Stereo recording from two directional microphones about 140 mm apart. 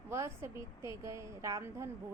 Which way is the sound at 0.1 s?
20° right (ahead or behind).